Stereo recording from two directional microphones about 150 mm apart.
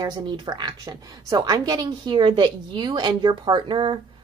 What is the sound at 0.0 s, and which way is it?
A woman's voice, 30° right (ahead or behind).